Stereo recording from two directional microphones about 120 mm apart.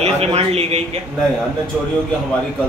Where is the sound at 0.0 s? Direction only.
60° right (ahead or behind).